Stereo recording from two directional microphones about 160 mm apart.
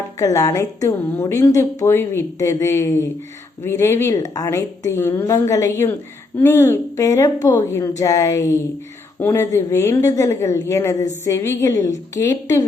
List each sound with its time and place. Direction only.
0.2 s a woman's voice: 20° left (ahead or behind)